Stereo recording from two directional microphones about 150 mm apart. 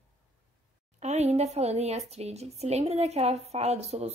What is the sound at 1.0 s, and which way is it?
Speech, 45° right (ahead or behind).